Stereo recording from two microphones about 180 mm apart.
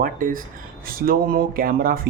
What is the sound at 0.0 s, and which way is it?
Speech, 50° right (ahead or behind).